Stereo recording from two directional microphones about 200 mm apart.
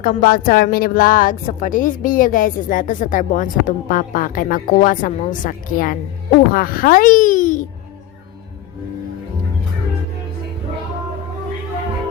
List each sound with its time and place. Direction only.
0.0 s a woman's voice: 45° left (ahead or behind)